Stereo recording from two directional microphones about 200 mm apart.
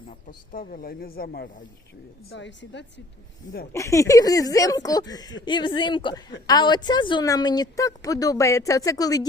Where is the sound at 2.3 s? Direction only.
60° left (ahead or behind).